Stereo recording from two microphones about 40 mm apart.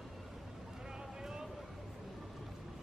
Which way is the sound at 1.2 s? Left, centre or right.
Centre.